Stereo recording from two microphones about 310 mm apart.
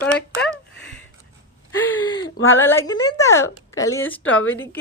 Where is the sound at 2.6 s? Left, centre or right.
Centre.